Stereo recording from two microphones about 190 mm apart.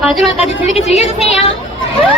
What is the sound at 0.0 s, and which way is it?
Speech, centre (ahead or behind).